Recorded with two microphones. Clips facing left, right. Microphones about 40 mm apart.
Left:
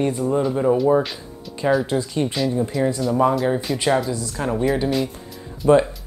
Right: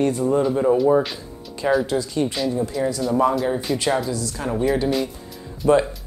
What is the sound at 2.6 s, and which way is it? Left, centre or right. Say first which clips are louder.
Speech: left 1 dB; centre.